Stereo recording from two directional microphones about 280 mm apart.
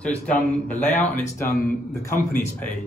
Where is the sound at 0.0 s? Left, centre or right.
Centre.